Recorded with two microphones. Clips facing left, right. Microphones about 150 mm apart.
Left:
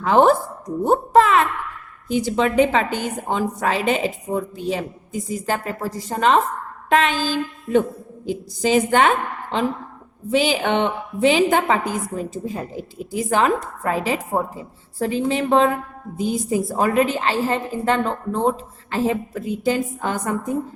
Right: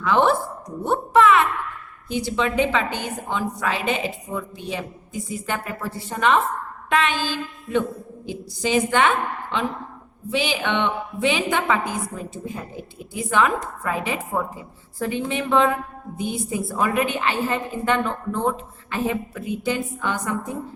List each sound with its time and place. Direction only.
0.0 s a woman's voice: 40° left (ahead or behind)
8.3 s a woman's voice: 45° left (ahead or behind)